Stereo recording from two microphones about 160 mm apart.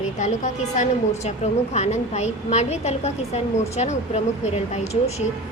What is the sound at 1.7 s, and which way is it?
A woman's voice, 45° left (ahead or behind).